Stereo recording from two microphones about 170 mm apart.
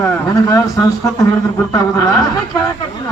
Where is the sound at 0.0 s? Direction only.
15° left (ahead or behind).